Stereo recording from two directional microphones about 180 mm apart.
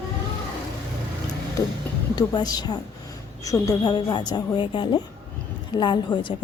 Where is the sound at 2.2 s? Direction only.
20° left (ahead or behind).